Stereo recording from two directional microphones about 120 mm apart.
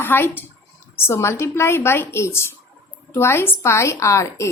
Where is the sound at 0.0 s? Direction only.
20° left (ahead or behind).